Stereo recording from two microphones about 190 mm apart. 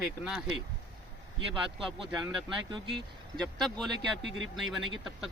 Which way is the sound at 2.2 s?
5° right (ahead or behind).